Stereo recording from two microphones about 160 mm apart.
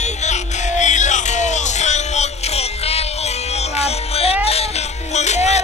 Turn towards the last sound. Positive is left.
turn(degrees=45)  # may be behind; listen again after turning